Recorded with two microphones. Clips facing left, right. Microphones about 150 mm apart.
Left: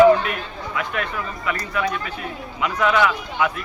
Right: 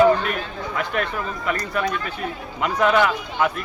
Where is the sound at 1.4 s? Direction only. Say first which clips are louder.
Even; 45° right (ahead or behind).